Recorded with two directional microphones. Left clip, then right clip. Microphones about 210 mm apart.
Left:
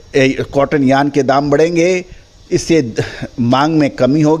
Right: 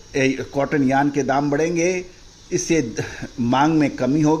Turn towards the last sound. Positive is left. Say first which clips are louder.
# left 7 dB
turn(degrees=35)  # may be behind; listen again after turning